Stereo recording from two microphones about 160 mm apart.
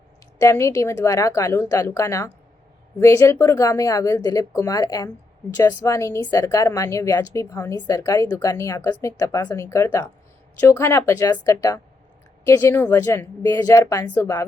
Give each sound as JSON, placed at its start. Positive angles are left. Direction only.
{"t": 0.3, "sound": "a woman's voice", "side_deg": 20}